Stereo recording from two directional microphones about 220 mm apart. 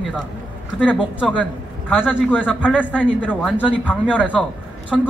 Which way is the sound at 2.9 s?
5° left (ahead or behind).